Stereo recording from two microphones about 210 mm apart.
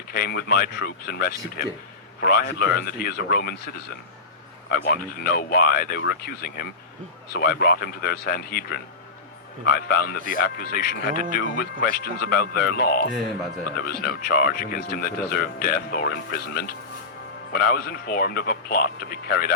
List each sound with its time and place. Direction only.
0.1 s a man's voice: 45° left (ahead or behind)
4.7 s a man's voice: 45° left (ahead or behind)